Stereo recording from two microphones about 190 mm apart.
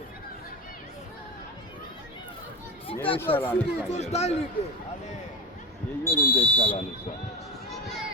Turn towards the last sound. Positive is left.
turn(degrees=10)  # may be behind; listen again after turning